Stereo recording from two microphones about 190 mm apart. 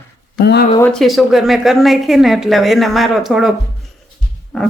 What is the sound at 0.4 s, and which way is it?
Speech, 60° left (ahead or behind).